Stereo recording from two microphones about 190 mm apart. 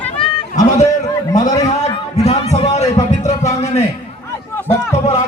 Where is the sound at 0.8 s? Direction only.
20° left (ahead or behind).